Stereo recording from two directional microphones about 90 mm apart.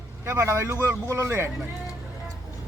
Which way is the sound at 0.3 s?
30° right (ahead or behind).